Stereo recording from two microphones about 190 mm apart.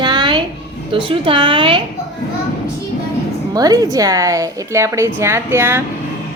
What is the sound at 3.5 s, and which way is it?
A woman's voice, 20° right (ahead or behind).